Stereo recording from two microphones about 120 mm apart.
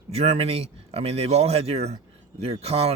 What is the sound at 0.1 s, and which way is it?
Speech, 60° right (ahead or behind).